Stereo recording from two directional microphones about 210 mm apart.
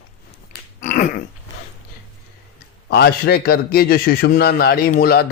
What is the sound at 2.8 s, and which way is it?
A man's voice, 50° left (ahead or behind).